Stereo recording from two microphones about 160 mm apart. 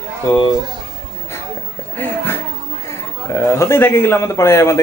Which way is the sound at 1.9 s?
10° left (ahead or behind).